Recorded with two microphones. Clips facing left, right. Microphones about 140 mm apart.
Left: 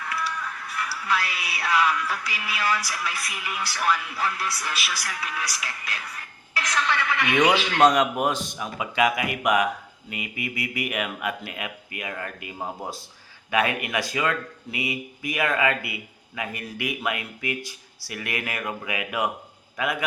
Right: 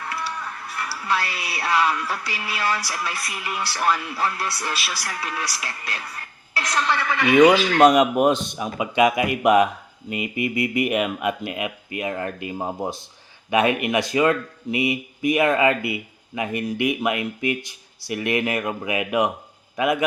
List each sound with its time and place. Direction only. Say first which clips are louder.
0.0 s speech: right 1 dB; 30° right (ahead or behind)
7.8 s speech: right 3 dB; 10° right (ahead or behind)
8.3 s speech: right 6 dB; 20° right (ahead or behind)